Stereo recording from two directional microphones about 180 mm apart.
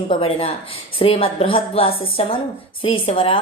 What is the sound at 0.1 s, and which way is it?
A woman's voice, 30° left (ahead or behind).